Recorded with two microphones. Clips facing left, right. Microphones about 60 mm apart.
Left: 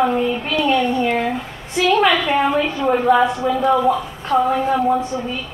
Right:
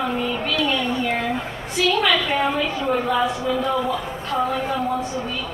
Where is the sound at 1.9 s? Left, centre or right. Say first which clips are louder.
Left 6 dB; left.